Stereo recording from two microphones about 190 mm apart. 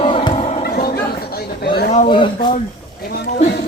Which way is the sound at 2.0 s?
25° left (ahead or behind).